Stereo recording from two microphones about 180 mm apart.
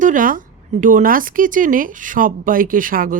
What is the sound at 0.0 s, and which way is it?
Speech, 50° right (ahead or behind).